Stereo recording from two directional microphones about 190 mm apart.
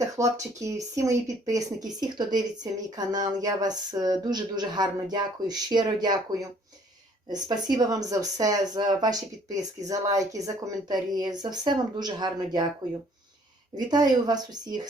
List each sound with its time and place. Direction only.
0.0 s speech: 15° right (ahead or behind)
7.3 s speech: 20° right (ahead or behind)
13.7 s speech: 20° right (ahead or behind)